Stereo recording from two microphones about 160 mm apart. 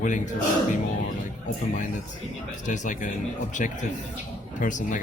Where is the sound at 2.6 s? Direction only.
50° left (ahead or behind).